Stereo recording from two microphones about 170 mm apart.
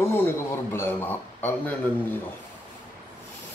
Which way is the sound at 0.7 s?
15° left (ahead or behind).